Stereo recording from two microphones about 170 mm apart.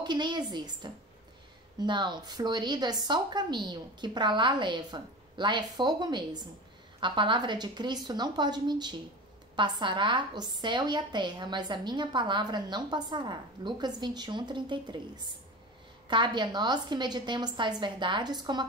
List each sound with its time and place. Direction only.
0.0 s a woman's voice: 25° right (ahead or behind)